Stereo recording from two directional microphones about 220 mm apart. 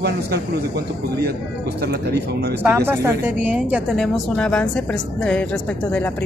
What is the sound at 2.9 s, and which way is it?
A woman's voice, 10° right (ahead or behind).